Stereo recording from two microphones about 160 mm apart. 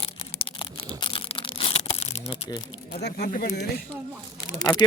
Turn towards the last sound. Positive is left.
turn(degrees=20)  # may be behind; listen again after turning